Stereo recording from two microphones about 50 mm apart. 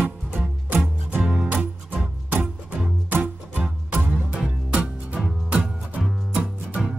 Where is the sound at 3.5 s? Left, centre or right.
Right.